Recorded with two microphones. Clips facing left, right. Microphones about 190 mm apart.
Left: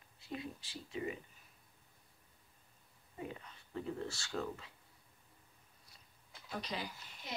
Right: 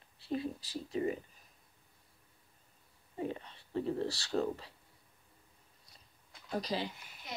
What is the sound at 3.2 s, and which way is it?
Speech, 30° right (ahead or behind).